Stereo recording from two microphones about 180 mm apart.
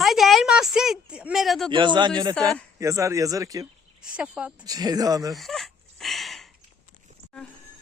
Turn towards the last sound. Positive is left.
turn(degrees=0)  # may be behind; listen again after turning